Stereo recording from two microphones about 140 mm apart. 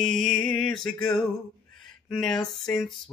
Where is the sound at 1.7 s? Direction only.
5° left (ahead or behind).